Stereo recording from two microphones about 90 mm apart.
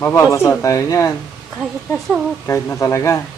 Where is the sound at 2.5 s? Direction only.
35° left (ahead or behind).